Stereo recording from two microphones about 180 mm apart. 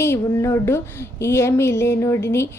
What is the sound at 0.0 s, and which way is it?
A woman's voice, 15° left (ahead or behind).